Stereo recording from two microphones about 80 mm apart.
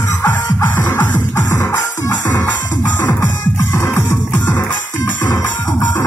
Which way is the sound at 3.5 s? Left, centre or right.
Left.